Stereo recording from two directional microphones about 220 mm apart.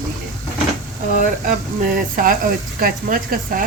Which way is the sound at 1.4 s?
35° right (ahead or behind).